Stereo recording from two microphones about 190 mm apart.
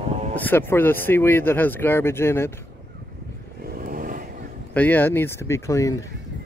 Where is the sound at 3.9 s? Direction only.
45° right (ahead or behind).